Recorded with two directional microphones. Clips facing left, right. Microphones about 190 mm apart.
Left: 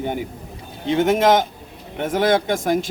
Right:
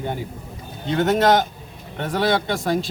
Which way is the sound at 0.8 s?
15° left (ahead or behind).